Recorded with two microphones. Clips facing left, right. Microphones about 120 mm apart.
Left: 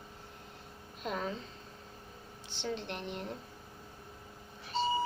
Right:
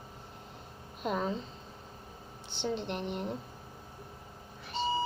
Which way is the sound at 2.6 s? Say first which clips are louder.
Right 4 dB; 10° right (ahead or behind).